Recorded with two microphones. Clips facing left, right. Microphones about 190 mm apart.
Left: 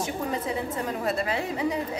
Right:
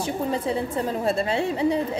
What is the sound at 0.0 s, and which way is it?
A woman's voice, 30° right (ahead or behind).